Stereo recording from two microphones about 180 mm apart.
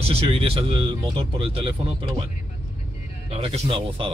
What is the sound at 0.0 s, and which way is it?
Speech, 35° right (ahead or behind).